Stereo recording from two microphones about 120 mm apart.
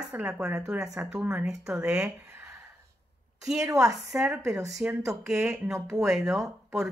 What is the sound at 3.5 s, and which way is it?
Speech, 25° right (ahead or behind).